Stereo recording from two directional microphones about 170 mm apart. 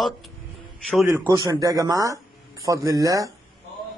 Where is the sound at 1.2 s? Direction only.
20° right (ahead or behind).